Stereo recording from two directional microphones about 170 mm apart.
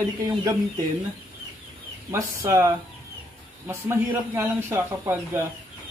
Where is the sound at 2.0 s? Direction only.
20° right (ahead or behind).